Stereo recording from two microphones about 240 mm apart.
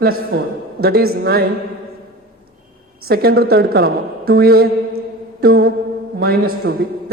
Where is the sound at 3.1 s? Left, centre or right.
Right.